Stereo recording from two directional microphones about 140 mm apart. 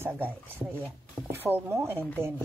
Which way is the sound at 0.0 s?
10° right (ahead or behind).